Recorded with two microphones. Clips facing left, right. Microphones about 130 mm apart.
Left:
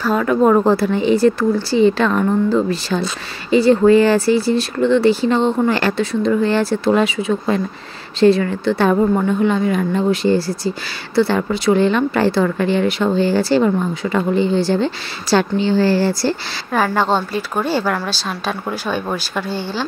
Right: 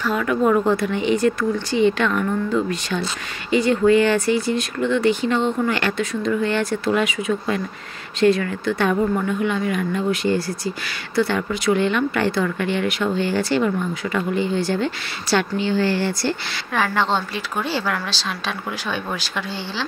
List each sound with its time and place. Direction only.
0.0 s a woman's voice: 35° left (ahead or behind)